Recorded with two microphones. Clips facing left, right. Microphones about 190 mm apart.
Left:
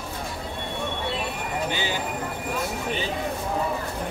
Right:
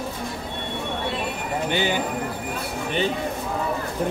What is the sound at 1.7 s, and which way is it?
Speech, 60° right (ahead or behind).